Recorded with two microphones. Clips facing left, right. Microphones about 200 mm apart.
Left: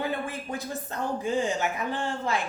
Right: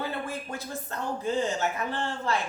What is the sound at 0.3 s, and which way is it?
Speech, 15° left (ahead or behind).